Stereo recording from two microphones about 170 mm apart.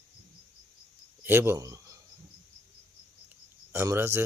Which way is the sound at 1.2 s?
15° right (ahead or behind).